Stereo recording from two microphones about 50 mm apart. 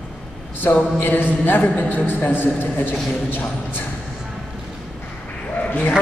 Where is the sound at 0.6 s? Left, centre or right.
Left.